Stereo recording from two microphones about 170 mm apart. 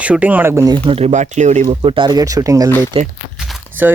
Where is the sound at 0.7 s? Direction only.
35° right (ahead or behind).